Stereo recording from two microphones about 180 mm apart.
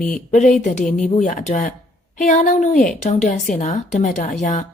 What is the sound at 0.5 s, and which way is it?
A woman's voice, 45° left (ahead or behind).